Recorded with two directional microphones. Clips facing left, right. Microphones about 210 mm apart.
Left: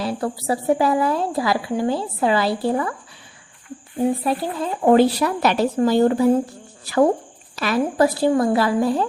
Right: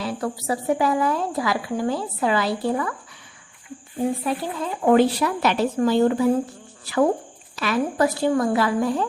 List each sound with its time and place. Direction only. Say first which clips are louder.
0.0 s a woman's voice: left 3 dB; 35° left (ahead or behind)
4.2 s a woman's voice: left 3 dB; 35° left (ahead or behind)
7.5 s a woman's voice: left 2 dB; 35° left (ahead or behind)